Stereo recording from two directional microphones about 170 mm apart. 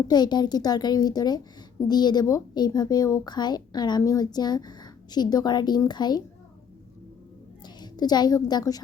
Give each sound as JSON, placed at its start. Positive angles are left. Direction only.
{"t": 0.1, "sound": "speech", "side_deg": 25}
{"t": 7.8, "sound": "a woman's voice", "side_deg": 25}